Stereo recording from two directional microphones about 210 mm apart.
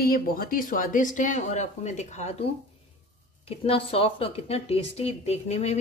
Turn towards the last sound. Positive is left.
turn(degrees=30)  # may be behind; listen again after turning